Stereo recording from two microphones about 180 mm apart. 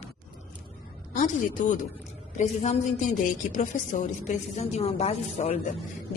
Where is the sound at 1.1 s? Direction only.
45° left (ahead or behind).